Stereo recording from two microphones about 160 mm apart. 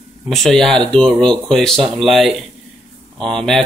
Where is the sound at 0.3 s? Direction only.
5° left (ahead or behind).